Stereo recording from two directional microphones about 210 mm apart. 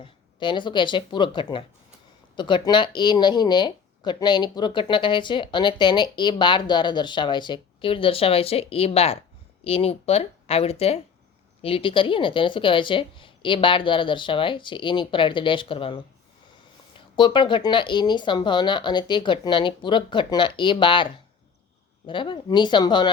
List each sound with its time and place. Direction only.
0.0 s speech: 20° left (ahead or behind)
17.2 s speech: 20° left (ahead or behind)